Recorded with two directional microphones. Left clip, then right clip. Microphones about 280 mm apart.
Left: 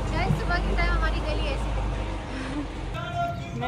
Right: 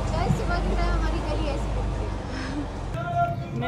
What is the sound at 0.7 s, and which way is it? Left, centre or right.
Vehicle, right.